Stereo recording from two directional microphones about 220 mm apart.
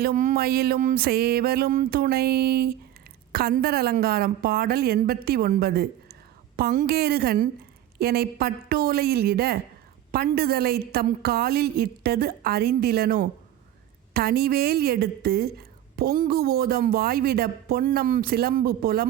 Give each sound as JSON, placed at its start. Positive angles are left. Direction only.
{"t": 0.0, "sound": "a woman's voice", "side_deg": -35}